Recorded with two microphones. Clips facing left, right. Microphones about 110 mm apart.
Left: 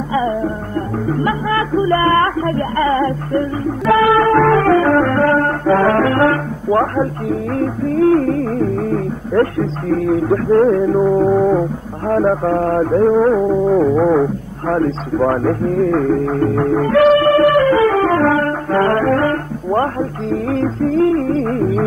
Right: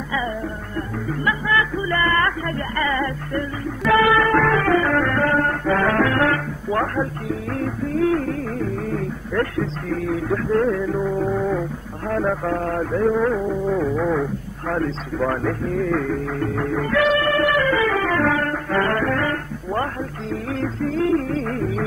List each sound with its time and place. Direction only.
0.1 s music: 35° left (ahead or behind)
14.7 s speech: 40° left (ahead or behind)
17.9 s music: 40° left (ahead or behind)